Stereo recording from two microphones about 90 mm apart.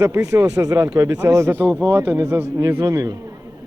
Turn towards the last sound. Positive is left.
turn(degrees=-45)  # may be behind; listen again after turning